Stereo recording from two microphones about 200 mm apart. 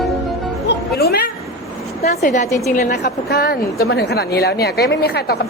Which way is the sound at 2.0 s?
40° left (ahead or behind).